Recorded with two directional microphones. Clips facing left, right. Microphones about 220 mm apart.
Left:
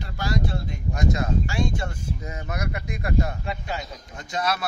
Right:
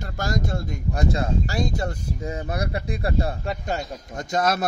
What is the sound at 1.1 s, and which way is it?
Speech, 35° right (ahead or behind).